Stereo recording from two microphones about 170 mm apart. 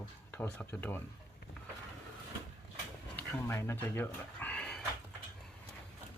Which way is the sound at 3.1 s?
15° left (ahead or behind).